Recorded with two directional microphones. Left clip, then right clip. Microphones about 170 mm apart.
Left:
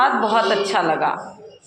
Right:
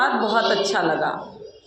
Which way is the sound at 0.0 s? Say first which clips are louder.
Left 3 dB; 10° left (ahead or behind).